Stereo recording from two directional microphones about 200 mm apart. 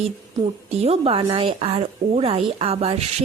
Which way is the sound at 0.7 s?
30° right (ahead or behind).